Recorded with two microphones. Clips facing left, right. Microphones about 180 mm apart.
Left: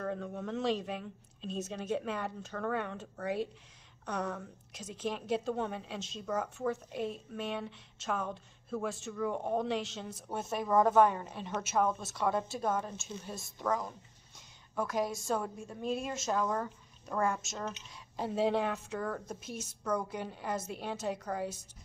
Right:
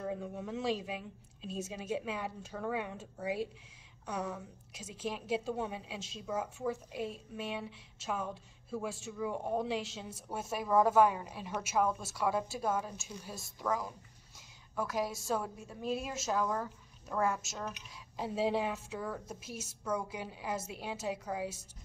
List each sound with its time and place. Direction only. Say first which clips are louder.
0.0 s a woman's voice: left 1 dB; 10° right (ahead or behind)
12.9 s speech: left 3 dB; 25° left (ahead or behind)
13.6 s speech: left 1 dB; 5° right (ahead or behind)